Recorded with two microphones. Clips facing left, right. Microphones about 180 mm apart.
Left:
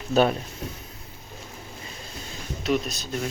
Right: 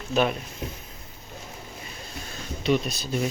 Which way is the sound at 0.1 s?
35° left (ahead or behind).